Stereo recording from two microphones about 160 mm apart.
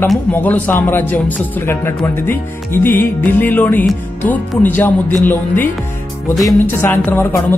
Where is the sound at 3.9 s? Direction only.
10° left (ahead or behind).